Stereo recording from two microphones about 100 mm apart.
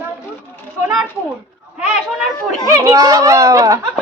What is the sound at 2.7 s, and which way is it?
Speech, 30° right (ahead or behind).